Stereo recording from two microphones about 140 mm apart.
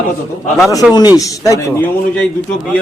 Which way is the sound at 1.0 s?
25° left (ahead or behind).